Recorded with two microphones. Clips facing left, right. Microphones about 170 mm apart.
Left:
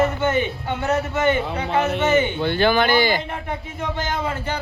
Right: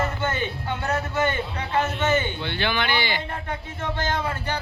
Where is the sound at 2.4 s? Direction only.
45° left (ahead or behind).